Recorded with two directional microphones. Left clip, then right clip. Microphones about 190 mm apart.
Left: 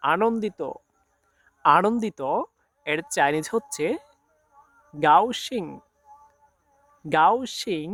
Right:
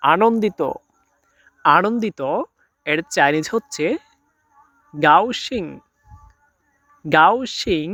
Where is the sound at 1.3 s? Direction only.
10° right (ahead or behind).